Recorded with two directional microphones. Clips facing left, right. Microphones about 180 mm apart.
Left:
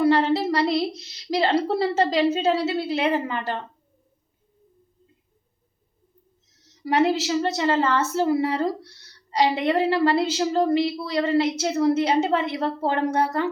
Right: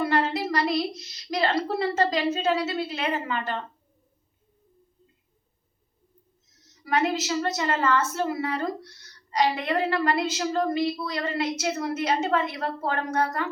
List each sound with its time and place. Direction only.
0.0 s a woman's voice: 30° left (ahead or behind)
6.8 s a woman's voice: 30° left (ahead or behind)